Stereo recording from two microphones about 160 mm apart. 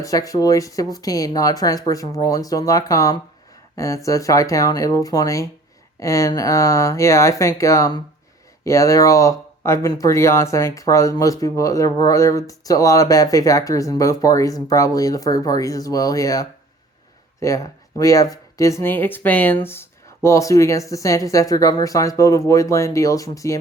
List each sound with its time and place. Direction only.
0.0 s speech: 20° left (ahead or behind)